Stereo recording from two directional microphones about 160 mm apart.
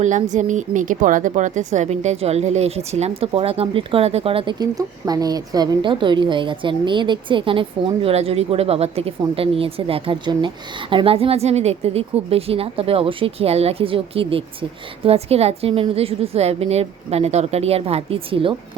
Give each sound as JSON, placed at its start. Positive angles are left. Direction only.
{"t": 0.0, "sound": "a woman's voice", "side_deg": -50}